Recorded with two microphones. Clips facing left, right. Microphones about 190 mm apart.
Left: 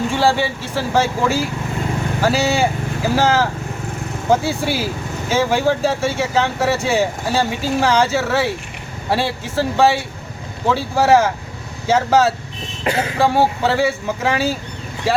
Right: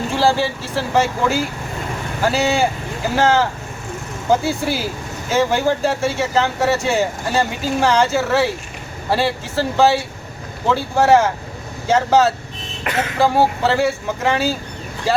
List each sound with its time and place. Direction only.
0.1 s speech: centre (ahead or behind)
12.8 s speech: 30° left (ahead or behind)
13.1 s speech: centre (ahead or behind)